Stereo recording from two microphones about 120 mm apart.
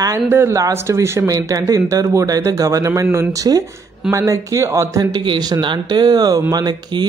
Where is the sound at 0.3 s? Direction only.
20° right (ahead or behind).